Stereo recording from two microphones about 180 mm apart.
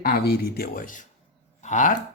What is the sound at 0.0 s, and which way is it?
Speech, 55° left (ahead or behind).